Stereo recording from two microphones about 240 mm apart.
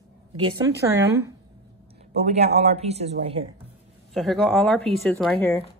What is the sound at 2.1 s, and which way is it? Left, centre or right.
Speech, right.